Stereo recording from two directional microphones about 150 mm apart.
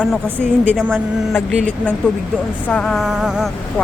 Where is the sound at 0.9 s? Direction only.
15° left (ahead or behind).